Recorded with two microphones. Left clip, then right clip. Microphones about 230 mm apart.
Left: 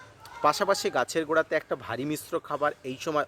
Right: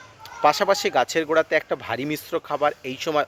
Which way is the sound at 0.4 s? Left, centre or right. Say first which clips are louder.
Right 5 dB; centre.